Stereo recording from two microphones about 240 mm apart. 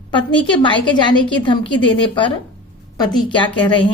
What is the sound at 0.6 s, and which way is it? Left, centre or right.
A woman's voice, centre.